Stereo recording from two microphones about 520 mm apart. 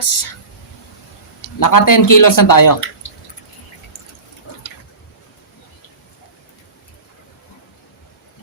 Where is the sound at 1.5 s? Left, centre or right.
Left.